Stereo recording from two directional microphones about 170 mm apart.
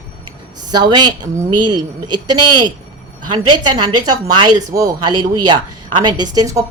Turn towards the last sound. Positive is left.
turn(degrees=-20)  # may be behind; listen again after turning